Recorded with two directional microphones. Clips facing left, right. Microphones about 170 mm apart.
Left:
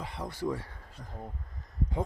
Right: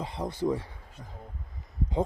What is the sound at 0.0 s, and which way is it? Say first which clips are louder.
Speech: right 4 dB; 25° right (ahead or behind).